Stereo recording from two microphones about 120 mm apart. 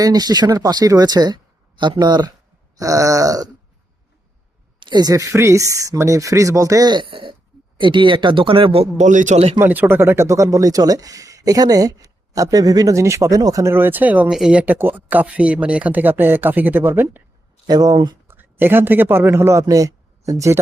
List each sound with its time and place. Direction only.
0.0 s speech: 35° right (ahead or behind)
4.8 s speech: 40° right (ahead or behind)
9.0 s a man's voice: 90° right; by 9.6 s 60° right (ahead or behind)
9.6 s speech: 20° right (ahead or behind)
17.7 s speech: 35° right (ahead or behind)
18.3 s a man's voice: 20° right (ahead or behind)